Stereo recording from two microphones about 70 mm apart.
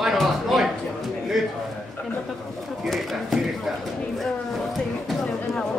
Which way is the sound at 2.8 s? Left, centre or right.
Centre.